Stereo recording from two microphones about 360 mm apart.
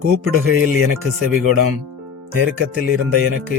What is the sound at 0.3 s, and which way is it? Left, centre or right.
Speech, right.